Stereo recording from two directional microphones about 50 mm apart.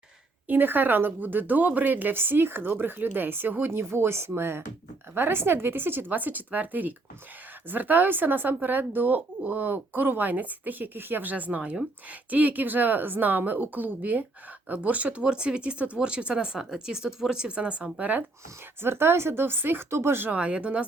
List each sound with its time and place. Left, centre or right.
0.4 s speech: right
3.7 s a woman's voice: right
6.1 s speech: right
18.8 s a woman's voice: right
19.9 s speech: right
20.3 s speech: right